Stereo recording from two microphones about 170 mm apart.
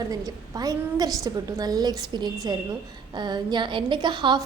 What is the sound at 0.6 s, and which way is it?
A woman's voice, 20° right (ahead or behind).